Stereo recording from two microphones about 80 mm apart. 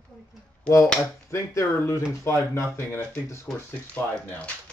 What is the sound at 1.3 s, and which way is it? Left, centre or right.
A man's voice, left.